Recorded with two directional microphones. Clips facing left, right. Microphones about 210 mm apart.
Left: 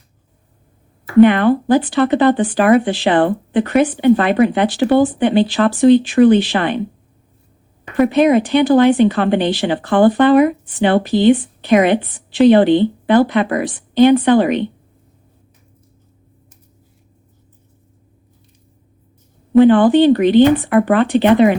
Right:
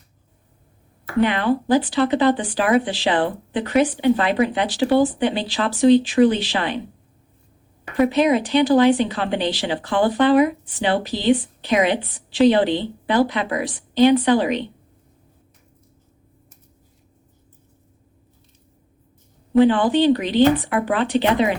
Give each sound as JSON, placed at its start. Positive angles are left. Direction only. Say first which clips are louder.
{"t": 1.2, "sound": "speech", "louder": "left 9 dB", "side_deg": 55}
{"t": 7.9, "sound": "speech", "louder": "left 5 dB", "side_deg": 55}
{"t": 19.5, "sound": "speech", "louder": "left 6 dB", "side_deg": 55}